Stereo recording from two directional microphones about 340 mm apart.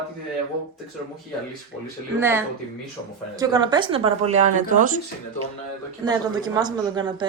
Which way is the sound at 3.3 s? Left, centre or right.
Centre.